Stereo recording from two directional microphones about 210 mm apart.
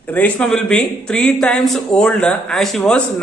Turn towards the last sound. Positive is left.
turn(degrees=5)  # may be behind; listen again after turning